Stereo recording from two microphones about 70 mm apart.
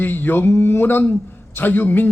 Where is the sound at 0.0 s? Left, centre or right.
Left.